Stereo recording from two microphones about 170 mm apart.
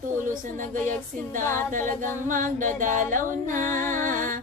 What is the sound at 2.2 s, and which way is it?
Music, 50° right (ahead or behind).